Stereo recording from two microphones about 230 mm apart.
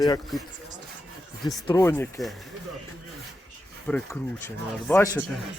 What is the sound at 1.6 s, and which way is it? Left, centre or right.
Speech, centre.